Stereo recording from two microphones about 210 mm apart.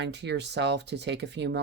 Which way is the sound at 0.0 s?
55° right (ahead or behind).